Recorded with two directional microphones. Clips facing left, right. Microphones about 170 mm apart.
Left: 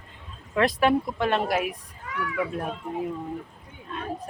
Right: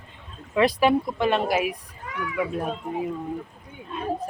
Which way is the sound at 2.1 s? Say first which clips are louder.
Right 1 dB; 20° right (ahead or behind).